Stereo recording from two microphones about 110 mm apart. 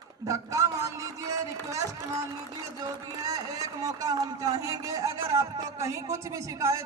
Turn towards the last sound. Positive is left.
turn(degrees=-30)  # may be behind; listen again after turning